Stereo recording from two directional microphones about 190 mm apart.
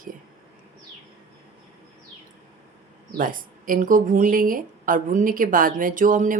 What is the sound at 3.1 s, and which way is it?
Speech, 45° right (ahead or behind).